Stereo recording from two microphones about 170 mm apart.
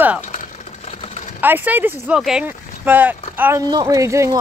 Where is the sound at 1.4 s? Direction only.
10° right (ahead or behind).